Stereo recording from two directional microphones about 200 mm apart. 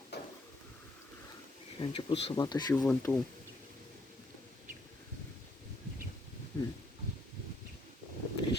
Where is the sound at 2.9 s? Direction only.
10° left (ahead or behind).